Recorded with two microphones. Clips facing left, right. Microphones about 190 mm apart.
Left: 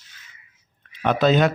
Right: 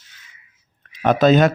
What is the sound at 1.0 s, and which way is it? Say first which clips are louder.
Speech: right 4 dB; 45° right (ahead or behind).